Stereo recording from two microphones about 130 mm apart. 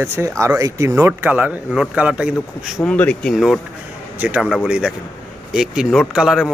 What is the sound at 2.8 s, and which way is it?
Speech, 10° left (ahead or behind).